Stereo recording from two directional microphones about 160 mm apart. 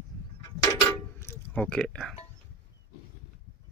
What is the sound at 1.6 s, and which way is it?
Speech, 5° left (ahead or behind).